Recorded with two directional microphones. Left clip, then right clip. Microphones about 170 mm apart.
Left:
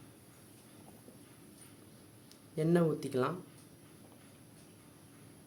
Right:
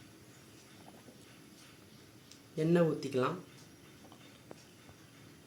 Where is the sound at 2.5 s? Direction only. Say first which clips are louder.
Right 1 dB; centre (ahead or behind).